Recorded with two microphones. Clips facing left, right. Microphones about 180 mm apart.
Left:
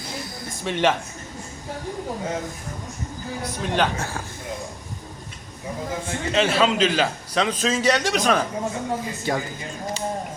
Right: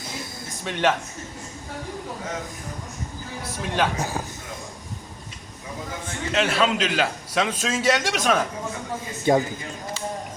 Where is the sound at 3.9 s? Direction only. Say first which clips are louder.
Right 2 dB; 15° right (ahead or behind).